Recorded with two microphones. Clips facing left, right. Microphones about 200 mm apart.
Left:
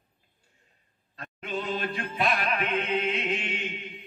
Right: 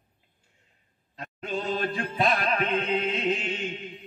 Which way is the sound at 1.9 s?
30° right (ahead or behind).